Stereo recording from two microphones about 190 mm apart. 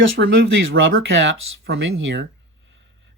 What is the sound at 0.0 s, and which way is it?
Speech, 85° right.